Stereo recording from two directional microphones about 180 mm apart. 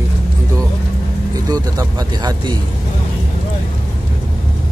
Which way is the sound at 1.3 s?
20° right (ahead or behind).